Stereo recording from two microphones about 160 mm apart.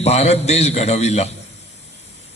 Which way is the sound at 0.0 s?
40° left (ahead or behind).